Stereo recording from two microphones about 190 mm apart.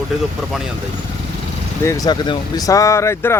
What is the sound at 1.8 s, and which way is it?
Speech, 15° left (ahead or behind).